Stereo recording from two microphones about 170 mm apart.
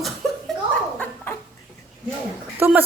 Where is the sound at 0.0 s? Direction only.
Centre (ahead or behind).